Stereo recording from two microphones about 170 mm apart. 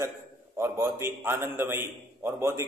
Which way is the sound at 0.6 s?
15° right (ahead or behind).